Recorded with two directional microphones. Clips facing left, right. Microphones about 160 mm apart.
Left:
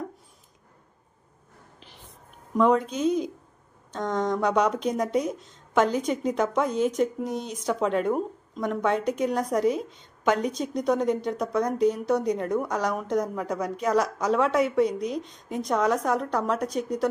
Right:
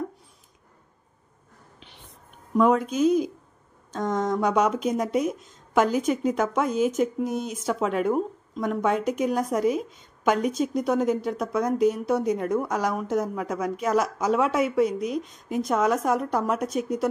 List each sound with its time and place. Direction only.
2.5 s a woman's voice: 5° right (ahead or behind)
15.0 s speech: 30° left (ahead or behind)
15.7 s a woman's voice: 5° right (ahead or behind)